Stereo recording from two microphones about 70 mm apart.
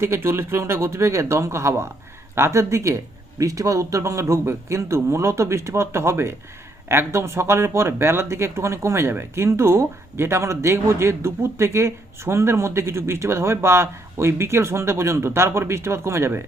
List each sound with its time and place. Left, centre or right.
0.0 s speech: right